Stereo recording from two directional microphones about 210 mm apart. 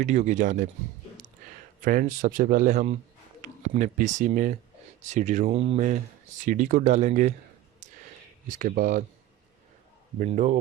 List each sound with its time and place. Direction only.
0.0 s speech: 35° right (ahead or behind)
1.8 s speech: 40° right (ahead or behind)
8.4 s speech: 40° right (ahead or behind)
10.2 s speech: 35° right (ahead or behind)